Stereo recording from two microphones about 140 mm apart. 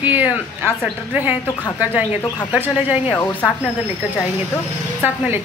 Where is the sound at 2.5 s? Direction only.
10° right (ahead or behind).